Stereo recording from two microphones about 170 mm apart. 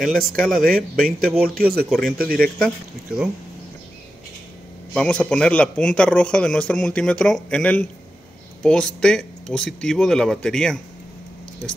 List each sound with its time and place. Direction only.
0.0 s a man's voice: centre (ahead or behind)
2.1 s speech: 60° right (ahead or behind)
4.9 s a man's voice: 5° left (ahead or behind)